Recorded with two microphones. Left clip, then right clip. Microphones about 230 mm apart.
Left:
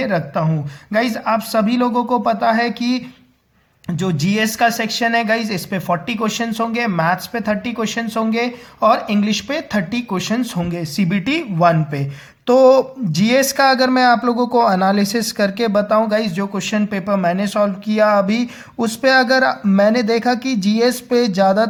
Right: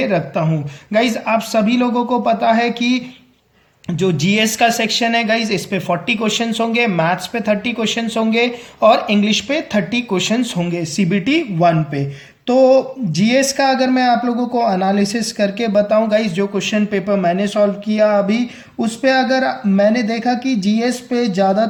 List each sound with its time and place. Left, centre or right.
0.0 s speech: left